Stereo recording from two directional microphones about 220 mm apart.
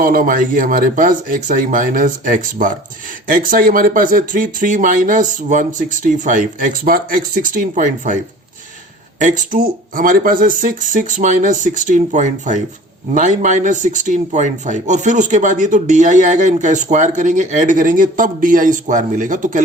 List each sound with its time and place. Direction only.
0.0 s speech: 40° right (ahead or behind)